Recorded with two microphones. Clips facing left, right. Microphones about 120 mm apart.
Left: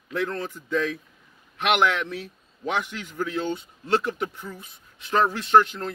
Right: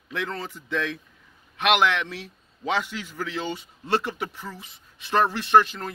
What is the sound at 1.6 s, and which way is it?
Speech, 65° right (ahead or behind).